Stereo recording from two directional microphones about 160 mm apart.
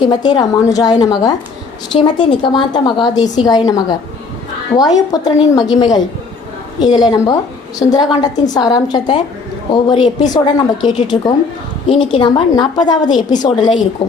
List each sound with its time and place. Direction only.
0.0 s a woman's voice: 25° left (ahead or behind)